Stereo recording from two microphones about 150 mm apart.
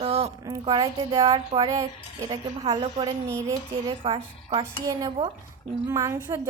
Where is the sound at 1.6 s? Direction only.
20° right (ahead or behind).